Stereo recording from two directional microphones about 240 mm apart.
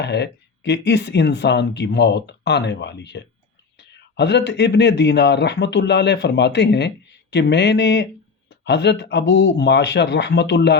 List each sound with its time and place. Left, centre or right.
0.0 s speech: left